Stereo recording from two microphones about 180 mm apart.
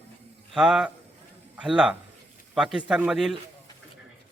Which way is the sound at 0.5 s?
5° right (ahead or behind).